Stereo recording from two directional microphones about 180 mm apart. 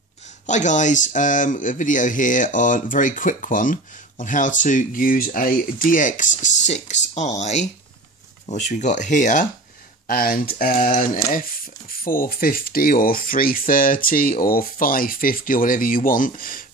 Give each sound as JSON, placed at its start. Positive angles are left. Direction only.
{"t": 0.5, "sound": "speech", "side_deg": 45}